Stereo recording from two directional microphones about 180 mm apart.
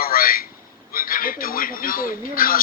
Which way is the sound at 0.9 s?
55° left (ahead or behind).